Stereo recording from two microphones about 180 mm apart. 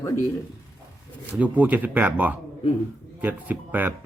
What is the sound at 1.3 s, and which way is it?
Speech, 10° right (ahead or behind).